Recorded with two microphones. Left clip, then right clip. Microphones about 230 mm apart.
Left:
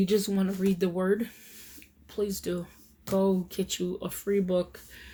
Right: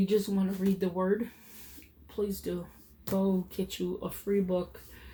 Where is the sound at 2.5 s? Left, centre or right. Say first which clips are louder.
Left 3 dB; left.